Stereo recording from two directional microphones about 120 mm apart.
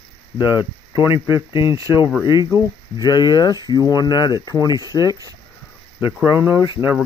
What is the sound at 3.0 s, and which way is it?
Speech, 35° left (ahead or behind).